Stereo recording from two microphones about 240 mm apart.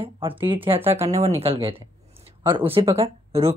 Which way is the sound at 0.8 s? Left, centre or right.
Centre.